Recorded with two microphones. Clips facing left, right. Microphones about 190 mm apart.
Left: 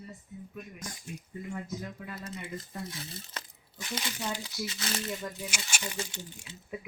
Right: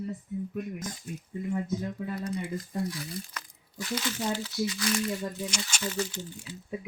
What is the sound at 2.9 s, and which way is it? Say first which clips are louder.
Speech: right 5 dB; 25° left (ahead or behind).